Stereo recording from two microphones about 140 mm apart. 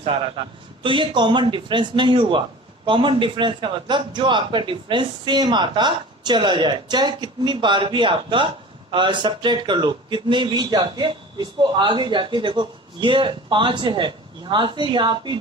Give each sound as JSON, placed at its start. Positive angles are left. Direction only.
{"t": 0.0, "sound": "a man's voice", "side_deg": -40}